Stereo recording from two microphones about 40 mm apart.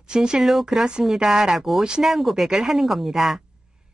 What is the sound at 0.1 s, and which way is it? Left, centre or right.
Speech, centre.